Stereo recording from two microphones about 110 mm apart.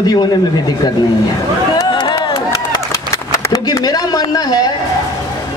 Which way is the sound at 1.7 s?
40° left (ahead or behind).